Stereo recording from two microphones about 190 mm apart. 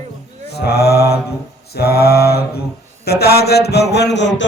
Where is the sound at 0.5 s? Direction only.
55° left (ahead or behind).